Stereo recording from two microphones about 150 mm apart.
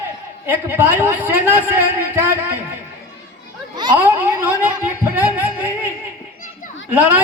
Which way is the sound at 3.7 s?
30° right (ahead or behind).